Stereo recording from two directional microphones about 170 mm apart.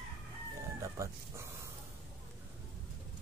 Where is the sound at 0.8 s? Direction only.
20° right (ahead or behind).